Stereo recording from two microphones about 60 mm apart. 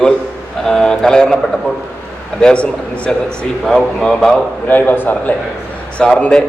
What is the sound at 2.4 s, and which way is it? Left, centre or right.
Speech, centre.